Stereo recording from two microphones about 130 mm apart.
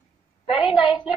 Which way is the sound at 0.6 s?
40° left (ahead or behind).